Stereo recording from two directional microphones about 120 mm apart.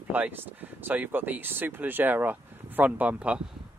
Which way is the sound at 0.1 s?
15° right (ahead or behind).